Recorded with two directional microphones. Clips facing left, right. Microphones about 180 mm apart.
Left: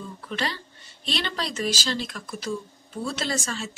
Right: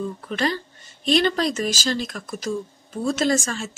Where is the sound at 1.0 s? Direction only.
45° right (ahead or behind).